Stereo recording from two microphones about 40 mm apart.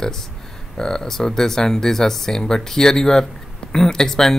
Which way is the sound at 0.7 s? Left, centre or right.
Centre.